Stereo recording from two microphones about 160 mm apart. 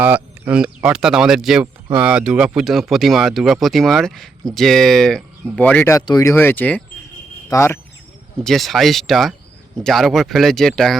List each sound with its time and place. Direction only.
0.0 s speech: 10° right (ahead or behind); by 7.8 s 15° left (ahead or behind)
8.4 s speech: centre (ahead or behind)